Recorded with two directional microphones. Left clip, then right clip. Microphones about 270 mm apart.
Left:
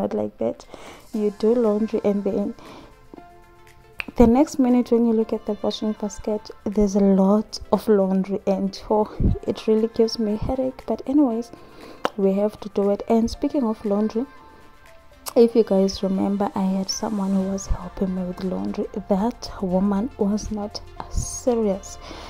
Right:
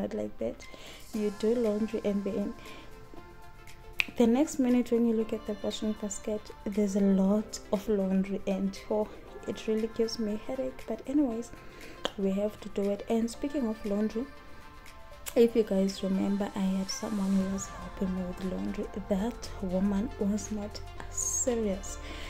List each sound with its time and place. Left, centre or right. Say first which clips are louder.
0.0 s a woman's voice: left 10 dB; left
4.1 s a woman's voice: left 11 dB; left
15.2 s a woman's voice: left 8 dB; centre